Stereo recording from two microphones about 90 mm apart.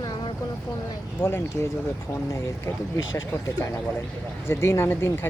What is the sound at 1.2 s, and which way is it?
Speech, 50° left (ahead or behind).